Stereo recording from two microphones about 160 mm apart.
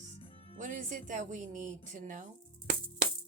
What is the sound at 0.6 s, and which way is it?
Speech, 55° right (ahead or behind).